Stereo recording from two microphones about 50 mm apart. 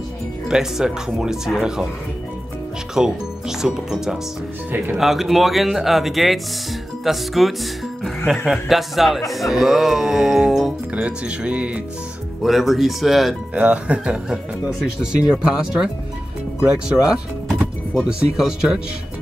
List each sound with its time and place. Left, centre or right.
0.5 s speech: centre
2.9 s speech: centre
11.0 s speech: right
12.4 s speech: centre
13.6 s speech: right
15.4 s speech: centre
17.5 s music: centre
18.0 s speech: centre